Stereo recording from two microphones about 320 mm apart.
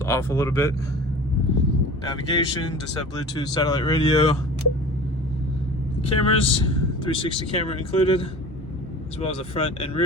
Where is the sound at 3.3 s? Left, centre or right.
Centre.